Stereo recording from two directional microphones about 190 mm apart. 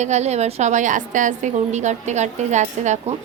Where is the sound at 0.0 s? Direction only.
35° right (ahead or behind).